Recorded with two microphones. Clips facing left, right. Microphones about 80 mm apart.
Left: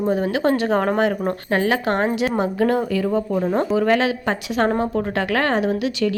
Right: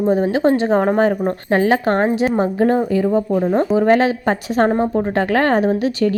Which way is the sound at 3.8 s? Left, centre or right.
Right.